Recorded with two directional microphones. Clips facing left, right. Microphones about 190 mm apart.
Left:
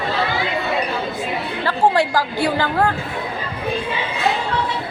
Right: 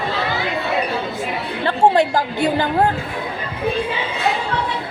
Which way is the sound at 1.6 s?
25° right (ahead or behind).